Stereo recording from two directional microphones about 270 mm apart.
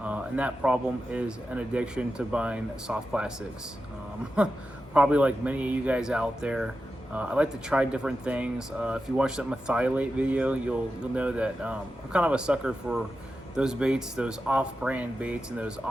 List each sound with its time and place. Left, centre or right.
0.0 s speech: centre
4.4 s speech: centre